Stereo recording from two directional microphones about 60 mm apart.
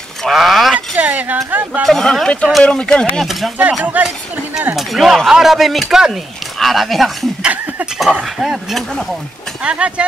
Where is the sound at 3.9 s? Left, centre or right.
Right.